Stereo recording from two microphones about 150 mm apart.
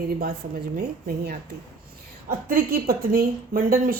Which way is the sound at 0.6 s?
85° right.